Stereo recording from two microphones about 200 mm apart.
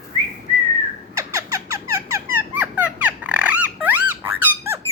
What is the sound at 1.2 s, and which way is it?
Squeak, 15° right (ahead or behind).